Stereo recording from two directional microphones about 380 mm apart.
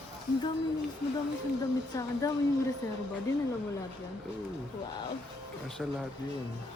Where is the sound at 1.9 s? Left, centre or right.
Centre.